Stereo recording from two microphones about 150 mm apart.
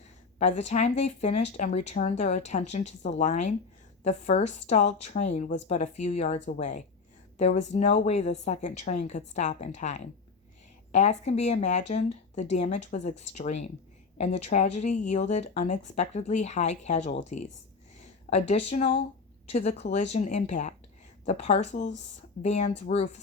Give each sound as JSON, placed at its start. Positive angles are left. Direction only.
{"t": 0.3, "sound": "speech", "side_deg": 50}